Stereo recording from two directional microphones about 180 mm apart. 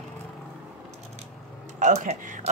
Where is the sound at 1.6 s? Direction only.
40° right (ahead or behind).